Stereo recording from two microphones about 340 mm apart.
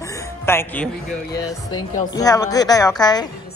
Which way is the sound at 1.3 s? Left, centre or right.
Centre.